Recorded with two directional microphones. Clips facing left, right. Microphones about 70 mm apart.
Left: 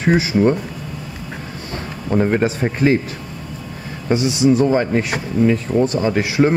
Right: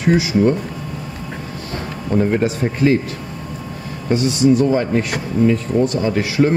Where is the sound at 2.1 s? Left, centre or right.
Left.